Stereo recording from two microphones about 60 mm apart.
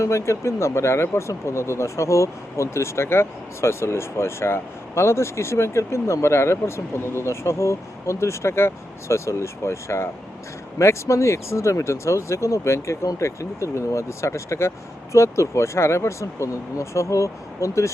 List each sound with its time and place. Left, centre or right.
0.0 s speech: left